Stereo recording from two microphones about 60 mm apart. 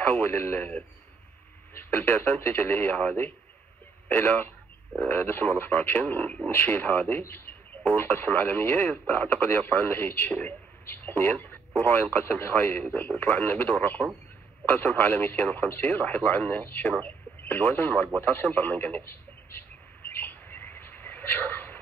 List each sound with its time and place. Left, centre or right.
0.0 s speech: left
1.8 s speech: left
6.5 s speech: left
17.0 s radio: left